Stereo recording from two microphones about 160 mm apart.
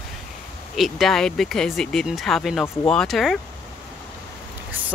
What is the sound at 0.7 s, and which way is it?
Speech, centre (ahead or behind).